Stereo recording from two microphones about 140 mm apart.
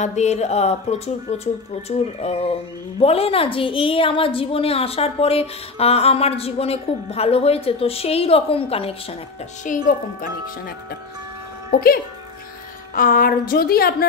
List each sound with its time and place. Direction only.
0.0 s a woman's voice: 55° left (ahead or behind)
9.7 s a woman's voice: 70° left (ahead or behind)
11.7 s a woman's voice: 90° left